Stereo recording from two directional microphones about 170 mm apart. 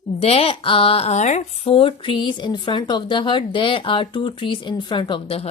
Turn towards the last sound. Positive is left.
turn(degrees=35)  # may be behind; listen again after turning